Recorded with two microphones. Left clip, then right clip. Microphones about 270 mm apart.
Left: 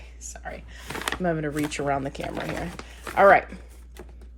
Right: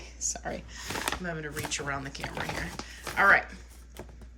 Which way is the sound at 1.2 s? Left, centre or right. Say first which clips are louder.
Left 8 dB; centre.